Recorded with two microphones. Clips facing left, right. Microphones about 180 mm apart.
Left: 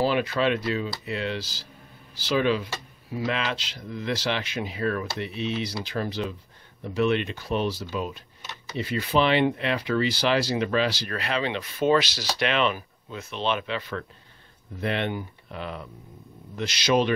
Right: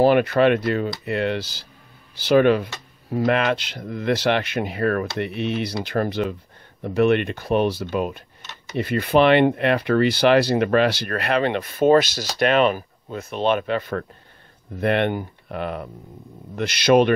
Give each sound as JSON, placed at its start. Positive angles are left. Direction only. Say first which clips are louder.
{"t": 0.0, "sound": "speech", "louder": "right 8 dB", "side_deg": -55}